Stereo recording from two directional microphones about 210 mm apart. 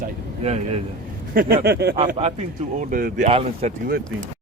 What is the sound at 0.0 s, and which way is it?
Vehicle, 30° right (ahead or behind).